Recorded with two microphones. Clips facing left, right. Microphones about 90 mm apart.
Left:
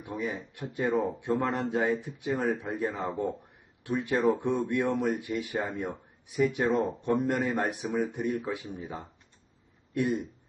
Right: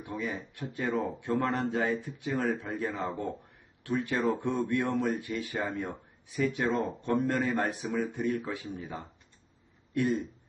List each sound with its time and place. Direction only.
0.0 s speech: 20° left (ahead or behind)